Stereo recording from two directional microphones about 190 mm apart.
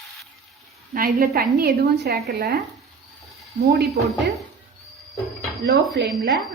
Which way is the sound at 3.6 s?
55° right (ahead or behind).